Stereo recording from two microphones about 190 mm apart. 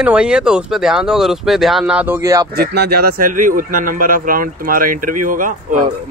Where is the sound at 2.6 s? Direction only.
55° right (ahead or behind).